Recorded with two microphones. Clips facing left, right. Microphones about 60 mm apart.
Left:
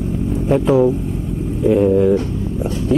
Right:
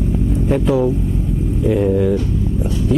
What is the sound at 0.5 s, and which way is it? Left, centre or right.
Speech, left.